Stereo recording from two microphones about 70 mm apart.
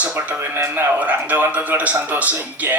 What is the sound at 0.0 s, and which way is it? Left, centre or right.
Music, right.